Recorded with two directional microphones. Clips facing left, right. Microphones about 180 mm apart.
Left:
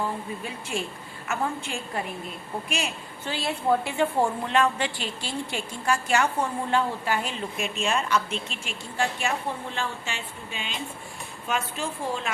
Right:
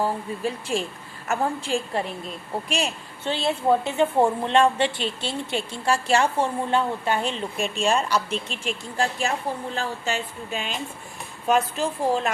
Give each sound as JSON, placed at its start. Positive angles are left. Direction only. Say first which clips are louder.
{"t": 0.0, "sound": "a woman's voice", "louder": "right 5 dB", "side_deg": -35}